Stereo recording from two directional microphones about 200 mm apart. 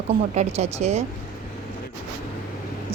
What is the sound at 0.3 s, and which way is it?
Speech, 35° right (ahead or behind).